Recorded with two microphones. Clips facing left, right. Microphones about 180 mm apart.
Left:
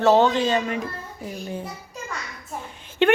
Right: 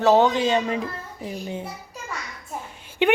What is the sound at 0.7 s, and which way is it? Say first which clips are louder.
Speech: right 1 dB; 30° right (ahead or behind).